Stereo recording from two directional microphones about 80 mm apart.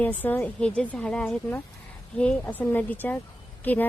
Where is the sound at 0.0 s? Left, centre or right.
Left.